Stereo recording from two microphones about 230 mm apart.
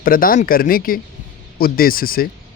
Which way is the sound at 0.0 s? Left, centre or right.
Left.